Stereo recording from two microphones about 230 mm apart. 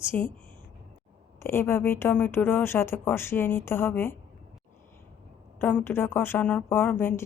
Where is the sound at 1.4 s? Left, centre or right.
Centre.